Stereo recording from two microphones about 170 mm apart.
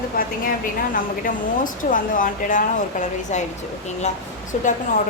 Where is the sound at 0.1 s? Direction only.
60° left (ahead or behind); by 3.5 s 45° left (ahead or behind).